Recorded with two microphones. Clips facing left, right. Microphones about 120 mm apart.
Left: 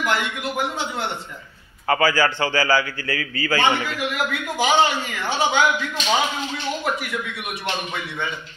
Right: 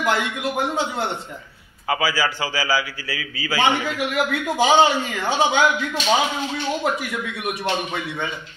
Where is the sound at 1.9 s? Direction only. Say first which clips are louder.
Left 3 dB; 10° right (ahead or behind).